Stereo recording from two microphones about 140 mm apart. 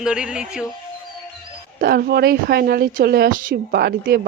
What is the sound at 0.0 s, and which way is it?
Music, 5° right (ahead or behind).